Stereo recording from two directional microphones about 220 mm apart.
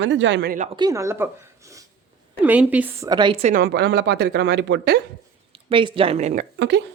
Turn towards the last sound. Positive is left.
turn(degrees=-35)  # may be behind; listen again after turning